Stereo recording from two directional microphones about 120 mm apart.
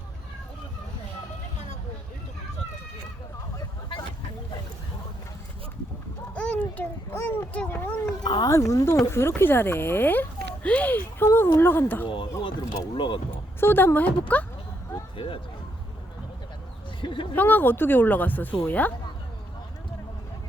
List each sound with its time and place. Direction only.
6.3 s a child's voice: 10° left (ahead or behind)
8.2 s speech: 35° left (ahead or behind)
8.5 s speech: 25° left (ahead or behind)
12.0 s speech: 45° left (ahead or behind)
13.3 s a woman's voice: 15° left (ahead or behind)
15.1 s speech: 45° left (ahead or behind)
17.0 s a sound: 45° left (ahead or behind)
17.3 s speech: 15° left (ahead or behind)